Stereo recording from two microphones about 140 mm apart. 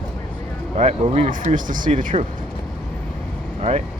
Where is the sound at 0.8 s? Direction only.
50° right (ahead or behind).